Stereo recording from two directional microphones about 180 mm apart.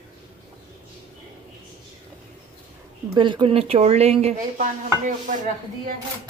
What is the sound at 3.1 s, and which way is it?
Speech, 25° right (ahead or behind).